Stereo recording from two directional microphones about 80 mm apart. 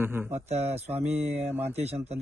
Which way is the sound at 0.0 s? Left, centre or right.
Right.